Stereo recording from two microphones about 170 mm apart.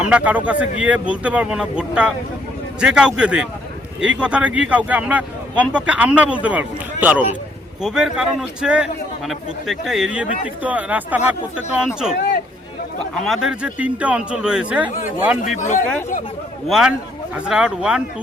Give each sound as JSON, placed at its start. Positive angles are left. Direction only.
{"t": 0.0, "sound": "a man's voice", "side_deg": -5}
{"t": 13.1, "sound": "a man's voice", "side_deg": 0}
{"t": 15.4, "sound": "speech", "side_deg": 45}
{"t": 16.6, "sound": "a man's voice", "side_deg": 0}